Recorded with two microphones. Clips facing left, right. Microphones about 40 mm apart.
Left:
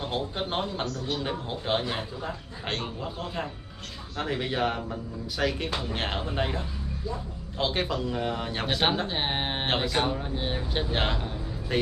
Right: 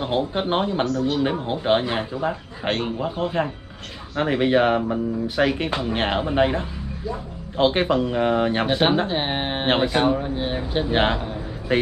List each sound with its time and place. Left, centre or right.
0.0 s speech: right
8.7 s speech: right
9.7 s speech: right; by 10.9 s centre
10.9 s speech: right